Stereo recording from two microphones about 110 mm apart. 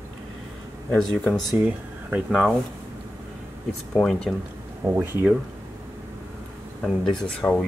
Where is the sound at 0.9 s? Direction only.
5° left (ahead or behind).